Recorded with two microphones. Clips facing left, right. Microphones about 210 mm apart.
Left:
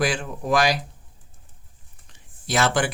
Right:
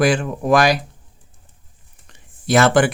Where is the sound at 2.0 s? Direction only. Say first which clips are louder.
Right 11 dB; 55° right (ahead or behind).